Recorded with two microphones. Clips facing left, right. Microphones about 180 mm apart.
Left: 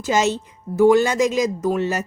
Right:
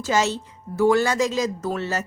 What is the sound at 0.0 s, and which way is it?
Speech, 20° left (ahead or behind).